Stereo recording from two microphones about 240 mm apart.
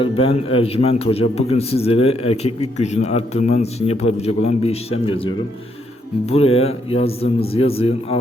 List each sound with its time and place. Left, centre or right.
0.0 s a man's voice: left